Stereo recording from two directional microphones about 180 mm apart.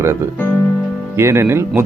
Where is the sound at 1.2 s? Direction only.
15° right (ahead or behind).